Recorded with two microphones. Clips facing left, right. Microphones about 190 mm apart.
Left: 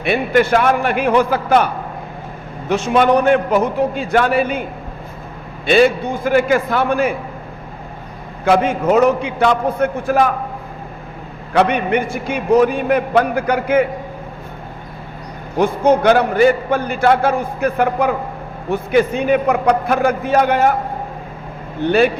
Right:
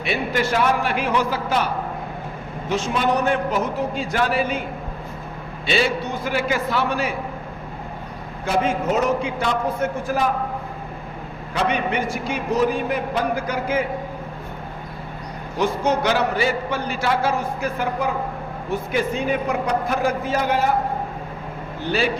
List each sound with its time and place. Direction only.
0.0 s a man's voice: 55° left (ahead or behind)
5.6 s a man's voice: 50° left (ahead or behind)
8.4 s a man's voice: 60° left (ahead or behind)
11.5 s a man's voice: 60° left (ahead or behind)
15.5 s a man's voice: 55° left (ahead or behind)
21.8 s a man's voice: 55° left (ahead or behind)